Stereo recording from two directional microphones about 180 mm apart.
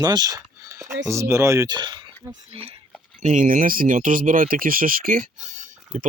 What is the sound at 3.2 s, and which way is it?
Speech, 45° right (ahead or behind).